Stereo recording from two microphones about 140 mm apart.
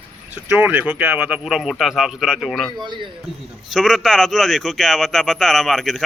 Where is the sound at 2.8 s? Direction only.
30° right (ahead or behind).